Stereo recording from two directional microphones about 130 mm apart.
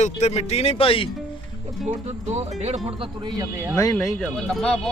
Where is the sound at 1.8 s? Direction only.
60° right (ahead or behind).